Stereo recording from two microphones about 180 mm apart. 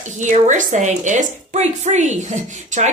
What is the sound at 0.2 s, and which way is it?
A woman's voice, 45° right (ahead or behind).